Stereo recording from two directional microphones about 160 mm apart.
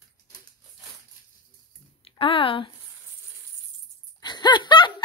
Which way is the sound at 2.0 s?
35° left (ahead or behind).